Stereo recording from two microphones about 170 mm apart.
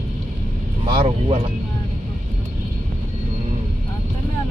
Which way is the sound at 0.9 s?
35° right (ahead or behind).